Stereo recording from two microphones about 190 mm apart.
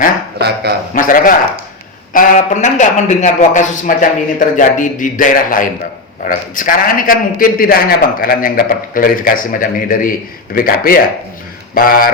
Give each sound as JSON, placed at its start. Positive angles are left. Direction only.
{"t": 0.3, "sound": "a man's voice", "side_deg": -60}
{"t": 0.9, "sound": "a man's voice", "side_deg": 45}